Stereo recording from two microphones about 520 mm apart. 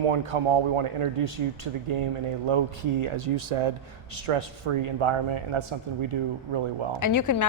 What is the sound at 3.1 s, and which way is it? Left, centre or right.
Speech, right.